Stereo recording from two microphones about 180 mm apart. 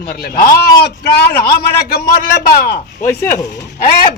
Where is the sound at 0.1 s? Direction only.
60° left (ahead or behind).